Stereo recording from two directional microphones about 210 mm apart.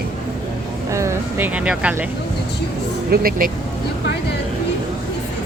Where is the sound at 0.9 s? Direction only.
15° right (ahead or behind).